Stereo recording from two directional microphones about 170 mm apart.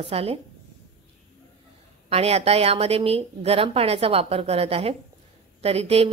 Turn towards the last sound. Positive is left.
turn(degrees=-35)  # may be behind; listen again after turning